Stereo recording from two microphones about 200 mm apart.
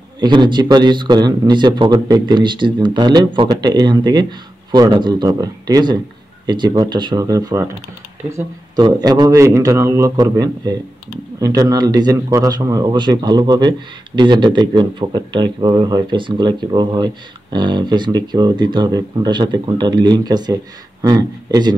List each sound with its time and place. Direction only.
0.2 s a man's voice: 20° right (ahead or behind)